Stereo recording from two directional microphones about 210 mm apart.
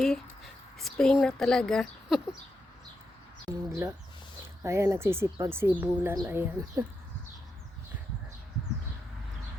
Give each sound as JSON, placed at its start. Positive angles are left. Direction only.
{"t": 0.0, "sound": "a sound", "side_deg": 0}
{"t": 1.2, "sound": "speech", "side_deg": 5}
{"t": 3.5, "sound": "speech", "side_deg": -15}